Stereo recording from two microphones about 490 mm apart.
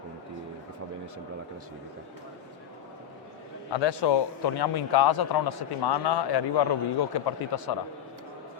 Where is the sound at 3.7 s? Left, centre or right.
Left.